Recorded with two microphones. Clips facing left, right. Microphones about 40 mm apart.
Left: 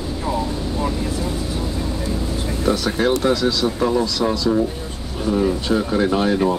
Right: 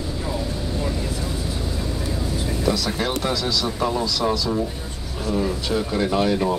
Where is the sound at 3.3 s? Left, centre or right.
Left.